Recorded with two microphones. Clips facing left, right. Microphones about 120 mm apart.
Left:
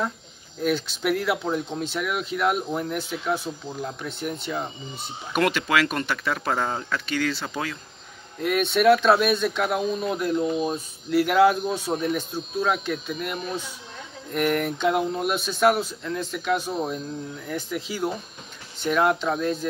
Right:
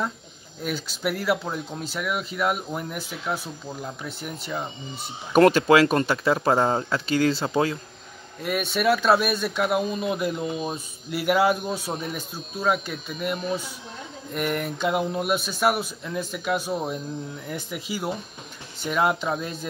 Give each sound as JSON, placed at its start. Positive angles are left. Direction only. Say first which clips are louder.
{"t": 0.7, "sound": "speech", "louder": "left 4 dB", "side_deg": -5}
{"t": 5.3, "sound": "speech", "louder": "right 7 dB", "side_deg": -35}
{"t": 8.4, "sound": "speech", "louder": "left 4 dB", "side_deg": -5}